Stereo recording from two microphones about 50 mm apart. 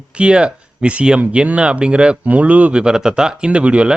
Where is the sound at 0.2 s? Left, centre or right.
Right.